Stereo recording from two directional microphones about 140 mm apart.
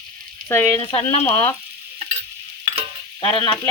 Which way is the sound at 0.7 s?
45° left (ahead or behind).